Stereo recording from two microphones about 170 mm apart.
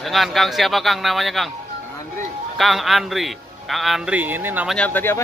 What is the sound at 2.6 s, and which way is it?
A man's voice, centre (ahead or behind).